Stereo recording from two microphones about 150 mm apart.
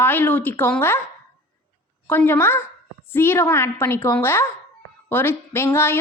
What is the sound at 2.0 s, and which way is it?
A woman's voice, 15° left (ahead or behind).